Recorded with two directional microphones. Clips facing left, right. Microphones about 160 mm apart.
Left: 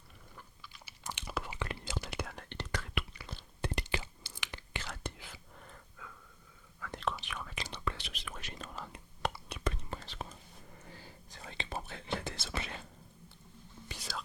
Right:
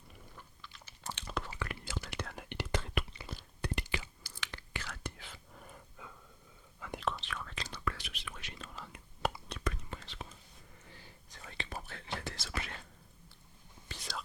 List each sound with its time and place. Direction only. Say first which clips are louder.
0.6 s crunch: right 1 dB; 10° left (ahead or behind)
1.5 s whispering: left 2 dB; 25° left (ahead or behind)
2.0 s whispering: left 1 dB; 10° left (ahead or behind)
2.3 s whispering: right 2 dB; 10° right (ahead or behind)
3.1 s a sound: right 1 dB; 25° right (ahead or behind)
3.6 s whispering: left 2 dB; 25° left (ahead or behind)
5.5 s a sound: right 1 dB; 10° right (ahead or behind)
6.7 s whispering: right 1 dB; 20° right (ahead or behind)
7.2 s whispering: even; 15° left (ahead or behind)
8.1 s whispering: left 2 dB; 40° left (ahead or behind)
9.2 s whispering: right 1 dB; 5° right (ahead or behind)
9.6 s whispering: left 2 dB; 35° left (ahead or behind)
13.8 s whispering: left 1 dB; 10° left (ahead or behind)